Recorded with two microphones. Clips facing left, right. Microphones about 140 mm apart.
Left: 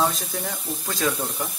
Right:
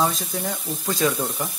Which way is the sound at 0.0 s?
Centre (ahead or behind).